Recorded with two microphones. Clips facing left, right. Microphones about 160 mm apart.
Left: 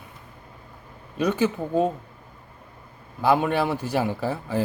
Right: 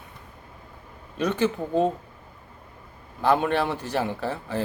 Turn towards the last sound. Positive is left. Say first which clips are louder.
# left 2 dB
turn(degrees=10)  # may be behind; listen again after turning